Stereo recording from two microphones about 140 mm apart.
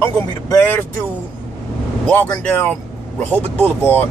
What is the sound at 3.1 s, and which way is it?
Speech, 10° left (ahead or behind).